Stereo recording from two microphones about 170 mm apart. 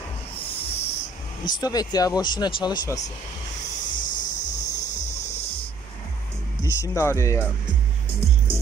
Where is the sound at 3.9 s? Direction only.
50° left (ahead or behind).